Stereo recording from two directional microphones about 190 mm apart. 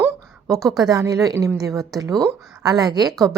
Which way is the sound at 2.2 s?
20° right (ahead or behind).